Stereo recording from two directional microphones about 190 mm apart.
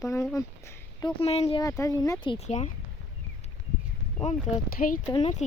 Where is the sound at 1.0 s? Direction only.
25° left (ahead or behind).